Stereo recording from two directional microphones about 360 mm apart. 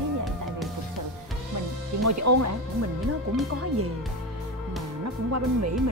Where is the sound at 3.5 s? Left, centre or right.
Right.